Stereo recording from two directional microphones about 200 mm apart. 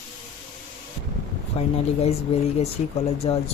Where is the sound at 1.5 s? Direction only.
30° left (ahead or behind).